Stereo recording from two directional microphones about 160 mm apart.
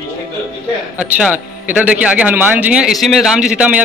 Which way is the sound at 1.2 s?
10° right (ahead or behind).